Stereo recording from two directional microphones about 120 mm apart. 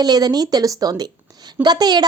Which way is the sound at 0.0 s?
35° right (ahead or behind).